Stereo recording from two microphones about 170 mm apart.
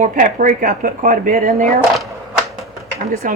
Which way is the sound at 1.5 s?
40° right (ahead or behind).